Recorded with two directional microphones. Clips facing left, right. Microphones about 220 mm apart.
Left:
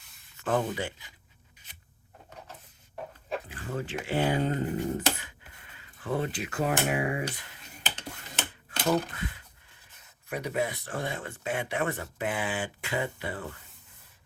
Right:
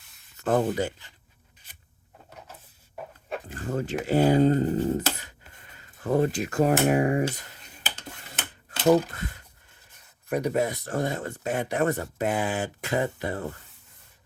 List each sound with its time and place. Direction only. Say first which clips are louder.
0.3 s speech: right 5 dB; 40° right (ahead or behind)
2.9 s dog: even; centre (ahead or behind)
3.5 s speech: right 5 dB; 45° right (ahead or behind)
9.1 s speech: right 1 dB; 40° right (ahead or behind)